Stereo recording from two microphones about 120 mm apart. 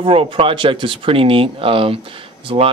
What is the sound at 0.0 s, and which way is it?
Speech, 50° right (ahead or behind).